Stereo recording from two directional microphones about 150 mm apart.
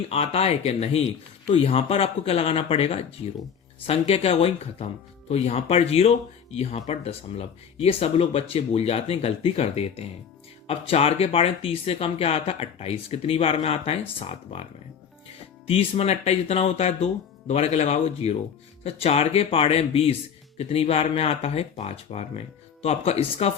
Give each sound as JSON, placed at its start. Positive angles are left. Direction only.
{"t": 0.1, "sound": "speech", "side_deg": 40}
{"t": 15.6, "sound": "speech", "side_deg": 45}